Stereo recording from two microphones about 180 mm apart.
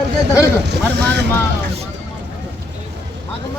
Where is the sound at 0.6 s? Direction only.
70° right (ahead or behind).